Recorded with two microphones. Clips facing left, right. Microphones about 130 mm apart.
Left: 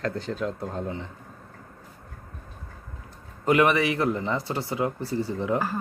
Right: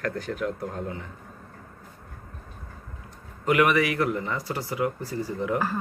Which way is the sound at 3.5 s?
25° left (ahead or behind).